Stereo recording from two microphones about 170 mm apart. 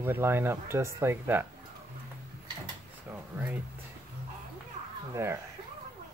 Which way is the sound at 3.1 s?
10° right (ahead or behind).